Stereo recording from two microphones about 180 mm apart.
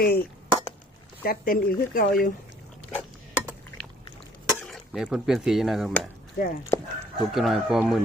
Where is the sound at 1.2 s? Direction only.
55° left (ahead or behind).